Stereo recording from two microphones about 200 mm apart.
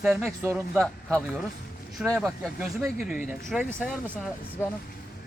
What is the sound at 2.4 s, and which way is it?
Speech, 10° right (ahead or behind).